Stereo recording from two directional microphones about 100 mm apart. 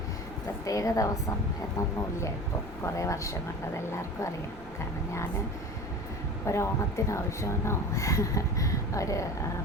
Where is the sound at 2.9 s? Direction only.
30° left (ahead or behind).